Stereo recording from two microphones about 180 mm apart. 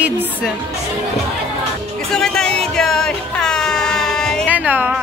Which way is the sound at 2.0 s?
5° left (ahead or behind).